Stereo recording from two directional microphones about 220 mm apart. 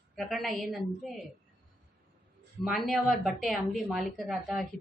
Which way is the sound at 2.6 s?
Centre (ahead or behind).